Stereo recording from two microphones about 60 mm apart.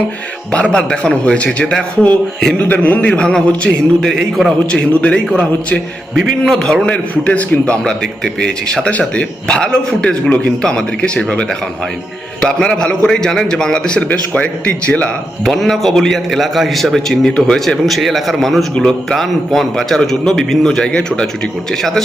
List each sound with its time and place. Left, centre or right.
0.5 s a man's voice: centre
4.1 s a man's voice: centre
4.6 s a man's voice: centre
6.8 s a man's voice: left
15.4 s a man's voice: centre